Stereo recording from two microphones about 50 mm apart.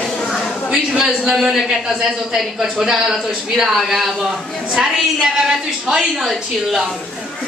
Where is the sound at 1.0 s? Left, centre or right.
Centre.